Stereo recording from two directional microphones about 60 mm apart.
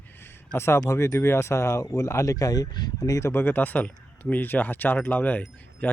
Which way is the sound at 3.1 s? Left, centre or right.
Left.